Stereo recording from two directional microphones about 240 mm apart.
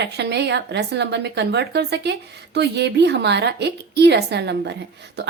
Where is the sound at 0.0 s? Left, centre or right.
Right.